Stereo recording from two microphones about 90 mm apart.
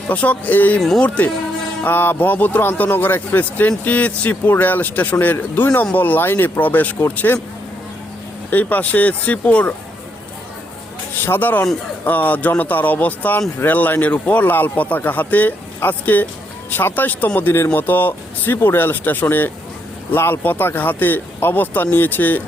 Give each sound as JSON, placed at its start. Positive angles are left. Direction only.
{"t": 0.1, "sound": "speech", "side_deg": 15}
{"t": 0.8, "sound": "speech", "side_deg": 5}
{"t": 1.0, "sound": "a man's voice", "side_deg": 15}
{"t": 8.4, "sound": "speech", "side_deg": 20}
{"t": 11.2, "sound": "a man's voice", "side_deg": 20}